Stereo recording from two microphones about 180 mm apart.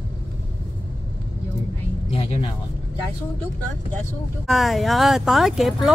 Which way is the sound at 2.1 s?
30° left (ahead or behind).